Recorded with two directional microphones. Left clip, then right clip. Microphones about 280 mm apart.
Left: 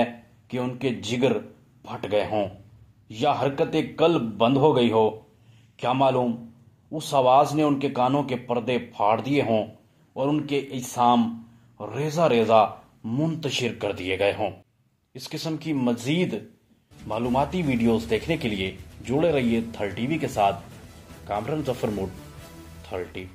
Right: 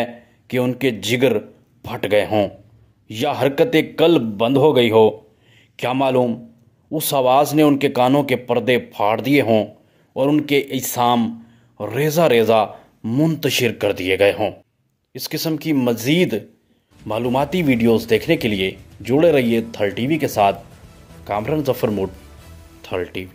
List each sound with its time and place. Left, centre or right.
0.0 s a man's voice: right